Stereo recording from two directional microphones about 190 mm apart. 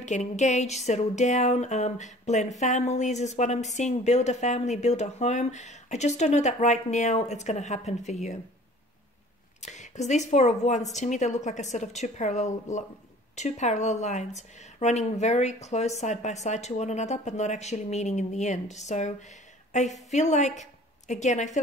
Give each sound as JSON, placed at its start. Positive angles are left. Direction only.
{"t": 0.0, "sound": "speech", "side_deg": 40}
{"t": 9.6, "sound": "speech", "side_deg": 40}